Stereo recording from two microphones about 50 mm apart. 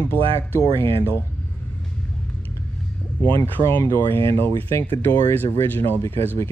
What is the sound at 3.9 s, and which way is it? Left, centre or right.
Speech, left.